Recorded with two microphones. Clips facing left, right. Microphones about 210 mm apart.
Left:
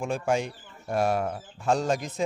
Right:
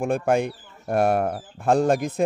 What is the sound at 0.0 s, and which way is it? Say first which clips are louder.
Speech: right 5 dB; 60° right (ahead or behind).